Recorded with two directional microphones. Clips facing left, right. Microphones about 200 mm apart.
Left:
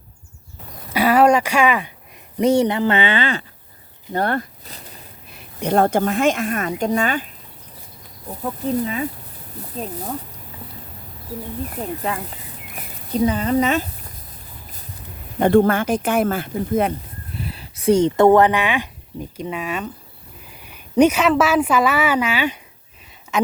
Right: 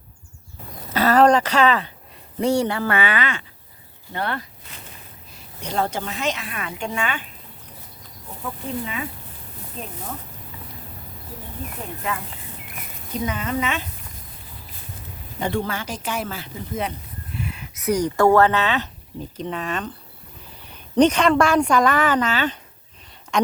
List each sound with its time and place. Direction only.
0.9 s speech: 10° left (ahead or behind); by 3.4 s 30° left (ahead or behind)
4.1 s speech: 45° left (ahead or behind)
5.3 s a woman's voice: 60° left (ahead or behind); by 7.3 s 40° left (ahead or behind)
8.4 s speech: 40° left (ahead or behind)
11.8 s speech: 35° left (ahead or behind)
15.4 s a woman's voice: 55° left (ahead or behind)
17.3 s a woman's voice: 35° left (ahead or behind); by 23.5 s 5° left (ahead or behind)